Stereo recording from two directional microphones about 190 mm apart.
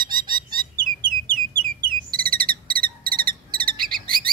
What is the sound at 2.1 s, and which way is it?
Cricket, 50° right (ahead or behind).